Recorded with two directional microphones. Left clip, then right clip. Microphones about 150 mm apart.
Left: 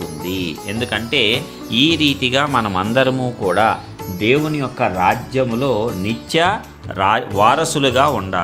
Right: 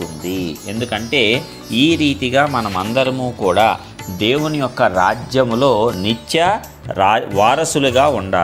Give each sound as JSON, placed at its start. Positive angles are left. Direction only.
{"t": 0.0, "sound": "speech", "side_deg": 0}
{"t": 2.0, "sound": "speech", "side_deg": 65}
{"t": 2.3, "sound": "speech", "side_deg": 0}
{"t": 2.6, "sound": "speech", "side_deg": 15}
{"t": 3.4, "sound": "speech", "side_deg": -10}